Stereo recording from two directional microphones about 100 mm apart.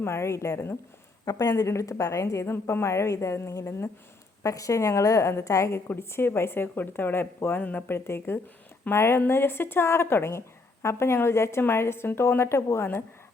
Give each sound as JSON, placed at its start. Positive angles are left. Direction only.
{"t": 0.0, "sound": "a woman's voice", "side_deg": 25}
{"t": 1.2, "sound": "a woman's voice", "side_deg": 35}